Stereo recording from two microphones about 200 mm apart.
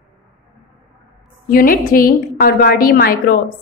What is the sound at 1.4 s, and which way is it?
A woman's voice, 45° left (ahead or behind).